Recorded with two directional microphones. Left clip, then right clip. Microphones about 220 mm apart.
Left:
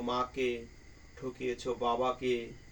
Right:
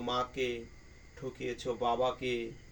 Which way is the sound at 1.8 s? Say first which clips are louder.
Even; 25° right (ahead or behind).